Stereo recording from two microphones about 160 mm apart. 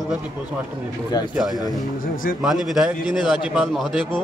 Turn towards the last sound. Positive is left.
turn(degrees=0)  # may be behind; listen again after turning